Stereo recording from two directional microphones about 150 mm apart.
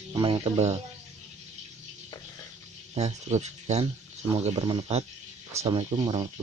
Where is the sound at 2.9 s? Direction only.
45° right (ahead or behind).